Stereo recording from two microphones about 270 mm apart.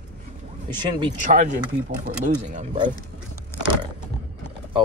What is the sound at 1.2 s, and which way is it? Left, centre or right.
Speech, right.